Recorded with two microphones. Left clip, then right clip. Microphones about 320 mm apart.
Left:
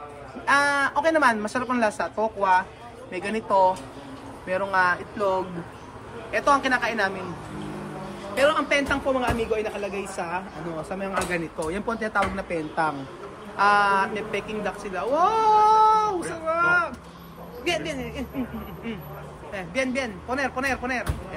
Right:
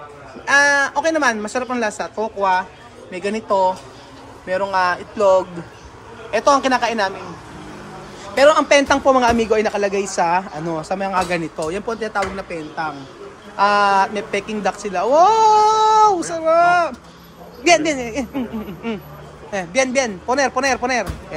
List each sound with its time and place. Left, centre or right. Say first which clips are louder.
0.5 s a woman's voice: right 6 dB; centre
8.4 s a woman's voice: right 9 dB; centre